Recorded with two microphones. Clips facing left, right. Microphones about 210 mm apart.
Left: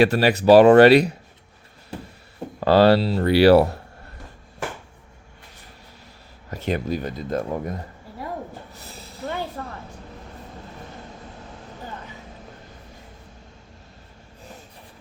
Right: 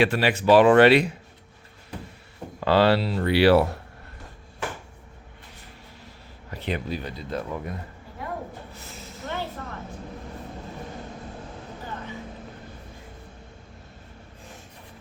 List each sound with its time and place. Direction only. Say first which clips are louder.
0.0 s speech: left 4 dB; 40° left (ahead or behind)
2.6 s speech: left 4 dB; 40° left (ahead or behind)
6.5 s speech: left 5 dB; 45° left (ahead or behind)
8.8 s a sound: left 7 dB; 35° left (ahead or behind)
9.6 s vehicle: left 3 dB; 35° left (ahead or behind)